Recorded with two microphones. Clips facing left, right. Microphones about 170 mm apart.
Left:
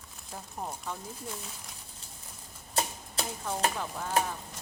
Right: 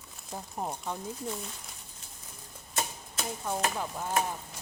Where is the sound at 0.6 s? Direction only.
20° right (ahead or behind).